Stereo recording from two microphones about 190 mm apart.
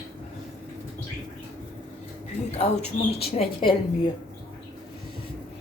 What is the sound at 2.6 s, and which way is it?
A woman's voice, 30° left (ahead or behind).